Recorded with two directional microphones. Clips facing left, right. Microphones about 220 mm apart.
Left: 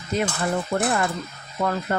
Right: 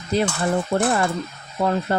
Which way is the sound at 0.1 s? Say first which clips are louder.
Right 3 dB; 30° right (ahead or behind).